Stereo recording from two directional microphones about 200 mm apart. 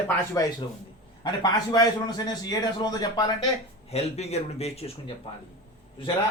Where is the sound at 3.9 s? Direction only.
30° left (ahead or behind).